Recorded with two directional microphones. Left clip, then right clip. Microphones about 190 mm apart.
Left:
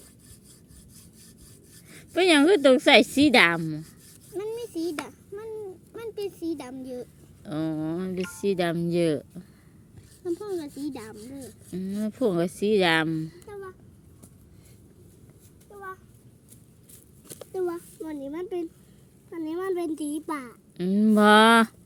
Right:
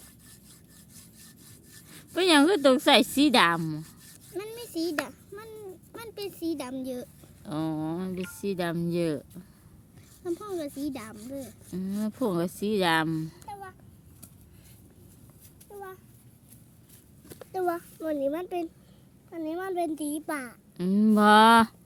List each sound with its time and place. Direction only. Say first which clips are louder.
1.9 s a woman's voice: left 2 dB; centre (ahead or behind)
4.4 s a sound: left 3 dB; 45° right (ahead or behind)
6.0 s a woman's voice: left 3 dB; 45° right (ahead or behind)
7.4 s a woman's voice: left 2 dB; centre (ahead or behind)
10.2 s a woman's voice: left 2 dB; 30° right (ahead or behind)
11.1 s speech: right 2 dB; 15° right (ahead or behind)
11.7 s a woman's voice: left 2 dB; centre (ahead or behind)
17.5 s speech: right 1 dB; 60° right (ahead or behind)
19.3 s a child's voice: left 3 dB; 20° right (ahead or behind)
20.7 s a woman's voice: left 2 dB; centre (ahead or behind)